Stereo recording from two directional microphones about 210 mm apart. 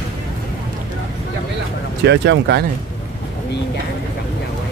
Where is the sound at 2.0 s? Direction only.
55° right (ahead or behind).